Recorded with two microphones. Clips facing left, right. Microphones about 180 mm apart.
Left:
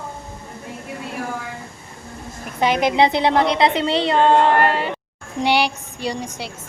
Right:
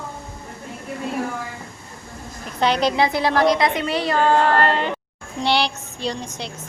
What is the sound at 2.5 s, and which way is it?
A woman's voice, 10° left (ahead or behind).